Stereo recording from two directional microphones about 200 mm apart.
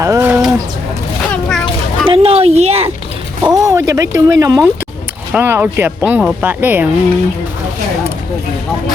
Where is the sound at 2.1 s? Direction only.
30° right (ahead or behind).